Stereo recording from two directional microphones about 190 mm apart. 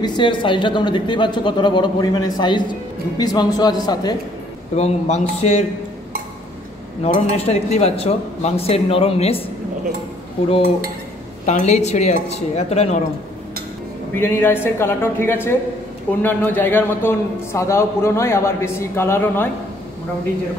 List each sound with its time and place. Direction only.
0.0 s speech: 25° left (ahead or behind)
4.7 s speech: 35° left (ahead or behind)
7.0 s speech: 35° left (ahead or behind)
11.4 s speech: 35° left (ahead or behind)
14.1 s a man's voice: 10° left (ahead or behind)